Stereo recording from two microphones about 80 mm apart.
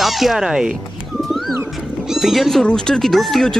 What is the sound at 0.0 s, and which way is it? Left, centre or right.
Speech, centre.